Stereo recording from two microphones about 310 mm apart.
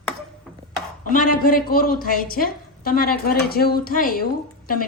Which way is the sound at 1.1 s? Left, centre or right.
Left.